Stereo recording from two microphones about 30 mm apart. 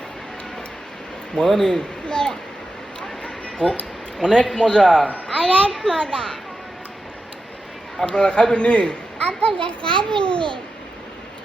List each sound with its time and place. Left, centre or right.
1.5 s speech: left
3.2 s a sound: left
4.2 s a man's voice: left
5.7 s a child's voice: centre
8.0 s a child's voice: left